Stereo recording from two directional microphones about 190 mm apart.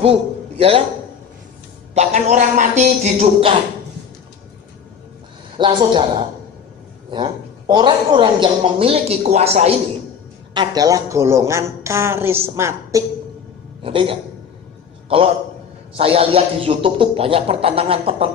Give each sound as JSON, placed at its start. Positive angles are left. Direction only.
{"t": 0.0, "sound": "a man's voice", "side_deg": -30}
{"t": 2.0, "sound": "a man's voice", "side_deg": -40}
{"t": 5.6, "sound": "a woman's voice", "side_deg": -25}
{"t": 10.5, "sound": "a woman's voice", "side_deg": -20}
{"t": 13.8, "sound": "a woman's voice", "side_deg": -30}